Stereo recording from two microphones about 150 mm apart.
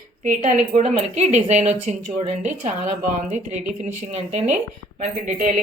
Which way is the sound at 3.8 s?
50° right (ahead or behind).